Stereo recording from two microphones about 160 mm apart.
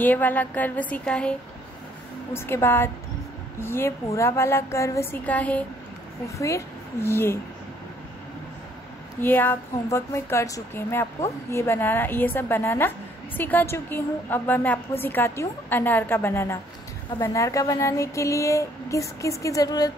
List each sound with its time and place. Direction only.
0.0 s speech: 10° left (ahead or behind)
2.3 s speech: 15° left (ahead or behind)
6.2 s speech: 20° left (ahead or behind)
9.2 s speech: 10° left (ahead or behind)
17.2 s a sound: 20° left (ahead or behind)